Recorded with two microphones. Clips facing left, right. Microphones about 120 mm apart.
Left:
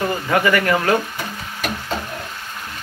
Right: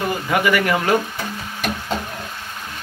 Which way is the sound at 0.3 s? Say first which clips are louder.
Left 1 dB; 15° right (ahead or behind).